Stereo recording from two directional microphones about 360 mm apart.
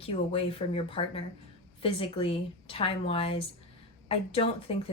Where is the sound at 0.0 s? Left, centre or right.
Centre.